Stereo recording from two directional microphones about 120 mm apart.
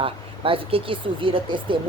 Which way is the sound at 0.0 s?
50° right (ahead or behind).